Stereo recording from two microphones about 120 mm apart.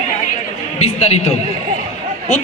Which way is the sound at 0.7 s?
60° left (ahead or behind).